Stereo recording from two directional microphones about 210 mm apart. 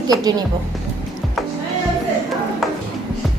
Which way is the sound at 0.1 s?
20° right (ahead or behind).